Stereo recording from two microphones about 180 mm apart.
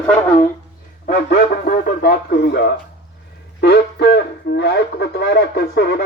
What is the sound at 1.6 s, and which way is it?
Speech, 55° left (ahead or behind).